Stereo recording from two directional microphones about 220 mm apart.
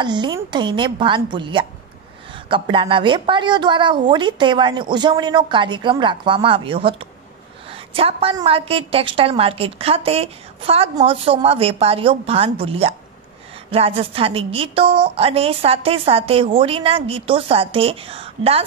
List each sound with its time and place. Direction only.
0.0 s a woman's voice: 20° right (ahead or behind)